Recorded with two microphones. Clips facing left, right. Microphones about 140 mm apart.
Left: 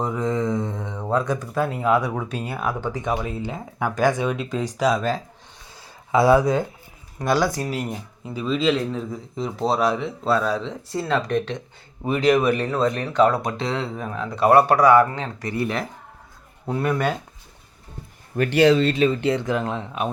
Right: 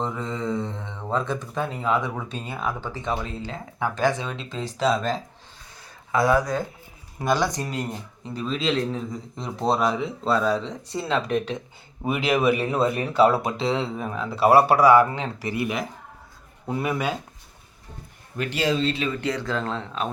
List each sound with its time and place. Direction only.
0.0 s speech: 15° left (ahead or behind)
6.1 s speech: 30° left (ahead or behind)
7.2 s speech: centre (ahead or behind)
18.3 s speech: 65° left (ahead or behind)
19.2 s speech: 25° left (ahead or behind)